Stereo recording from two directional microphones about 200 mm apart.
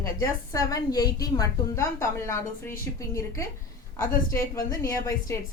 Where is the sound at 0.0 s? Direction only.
15° left (ahead or behind).